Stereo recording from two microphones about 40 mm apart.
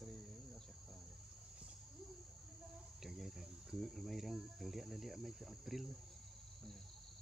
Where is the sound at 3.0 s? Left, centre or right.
Centre.